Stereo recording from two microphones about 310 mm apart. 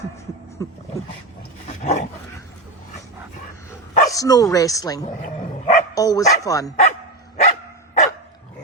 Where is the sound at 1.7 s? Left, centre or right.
Left.